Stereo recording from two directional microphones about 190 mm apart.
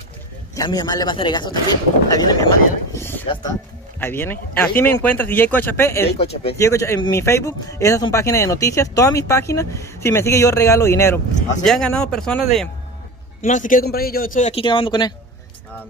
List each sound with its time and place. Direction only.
0.6 s speech: 20° left (ahead or behind)
6.1 s speech: 35° left (ahead or behind)
6.6 s speech: 15° left (ahead or behind)
11.6 s speech: 5° left (ahead or behind)
13.4 s speech: 45° left (ahead or behind)
14.5 s speech: 25° left (ahead or behind)